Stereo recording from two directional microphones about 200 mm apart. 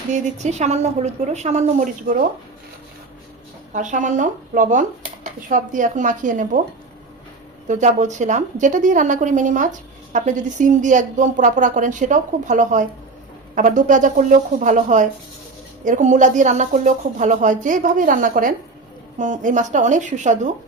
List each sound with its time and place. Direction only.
0.1 s speech: 35° right (ahead or behind)
3.7 s speech: 40° right (ahead or behind)
7.7 s speech: 35° right (ahead or behind)